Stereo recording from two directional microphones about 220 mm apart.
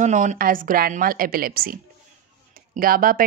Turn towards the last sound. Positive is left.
turn(degrees=-40)  # may be behind; listen again after turning